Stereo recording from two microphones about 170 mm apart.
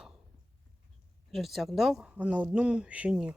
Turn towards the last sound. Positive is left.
turn(degrees=-5)  # may be behind; listen again after turning